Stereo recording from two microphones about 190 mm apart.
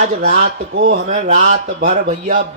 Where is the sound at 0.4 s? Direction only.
70° right (ahead or behind).